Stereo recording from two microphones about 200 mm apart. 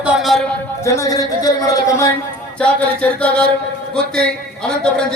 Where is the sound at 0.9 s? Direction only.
15° left (ahead or behind).